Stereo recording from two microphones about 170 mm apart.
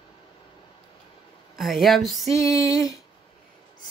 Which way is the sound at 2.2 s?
20° left (ahead or behind).